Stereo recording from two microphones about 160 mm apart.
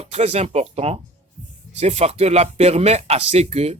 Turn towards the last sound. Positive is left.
turn(degrees=-40)  # may be behind; listen again after turning